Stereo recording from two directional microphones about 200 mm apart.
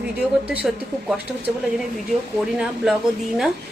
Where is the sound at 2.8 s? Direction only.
5° right (ahead or behind).